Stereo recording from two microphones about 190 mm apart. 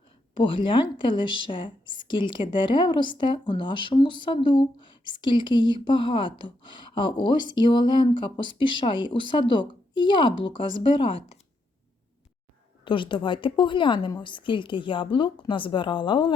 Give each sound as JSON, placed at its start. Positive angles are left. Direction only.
{"t": 0.3, "sound": "a woman's voice", "side_deg": 25}
{"t": 12.8, "sound": "a woman's voice", "side_deg": 25}